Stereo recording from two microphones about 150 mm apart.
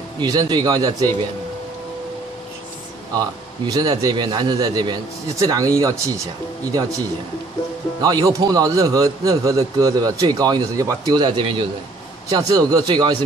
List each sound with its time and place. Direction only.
0.2 s a man's voice: 30° right (ahead or behind)
3.2 s a man's voice: 25° right (ahead or behind)
8.0 s a man's voice: 25° right (ahead or behind)